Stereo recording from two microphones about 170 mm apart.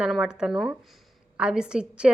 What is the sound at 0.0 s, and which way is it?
A woman's voice, 5° right (ahead or behind).